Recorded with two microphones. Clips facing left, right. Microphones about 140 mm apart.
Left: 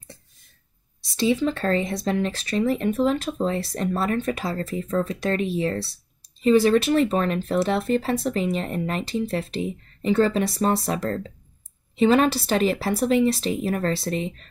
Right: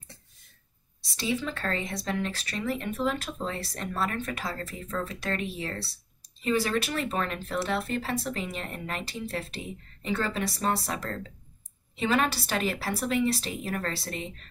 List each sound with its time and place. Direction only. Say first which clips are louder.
1.1 s speech: left 9 dB; 30° left (ahead or behind)